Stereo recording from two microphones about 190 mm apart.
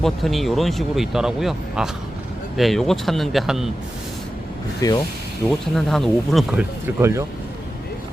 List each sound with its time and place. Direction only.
0.0 s speech: centre (ahead or behind)
4.8 s speech: 20° left (ahead or behind)
5.5 s speech: centre (ahead or behind); by 7.3 s 15° right (ahead or behind)